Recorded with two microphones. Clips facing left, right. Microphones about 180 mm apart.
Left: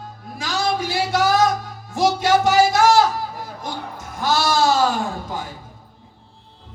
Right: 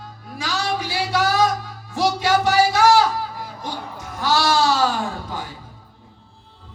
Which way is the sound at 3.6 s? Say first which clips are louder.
Even; 45° left (ahead or behind).